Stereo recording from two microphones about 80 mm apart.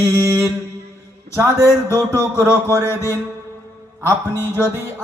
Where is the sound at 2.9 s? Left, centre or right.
Left.